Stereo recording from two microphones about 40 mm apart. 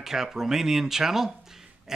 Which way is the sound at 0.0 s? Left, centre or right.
Centre.